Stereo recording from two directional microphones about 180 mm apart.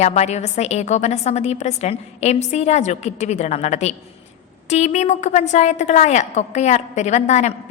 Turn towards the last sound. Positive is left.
turn(degrees=40)  # may be behind; listen again after turning